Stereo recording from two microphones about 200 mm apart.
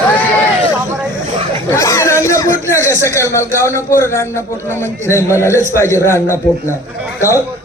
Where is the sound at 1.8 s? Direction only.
15° left (ahead or behind).